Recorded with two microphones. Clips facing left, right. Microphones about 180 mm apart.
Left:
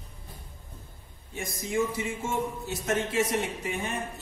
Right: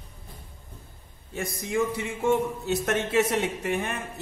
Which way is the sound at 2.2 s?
65° right (ahead or behind).